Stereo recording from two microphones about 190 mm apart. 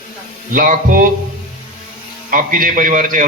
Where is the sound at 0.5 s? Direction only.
45° right (ahead or behind).